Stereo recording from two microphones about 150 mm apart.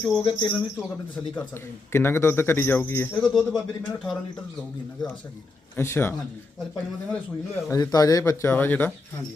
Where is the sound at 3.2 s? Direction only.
5° left (ahead or behind).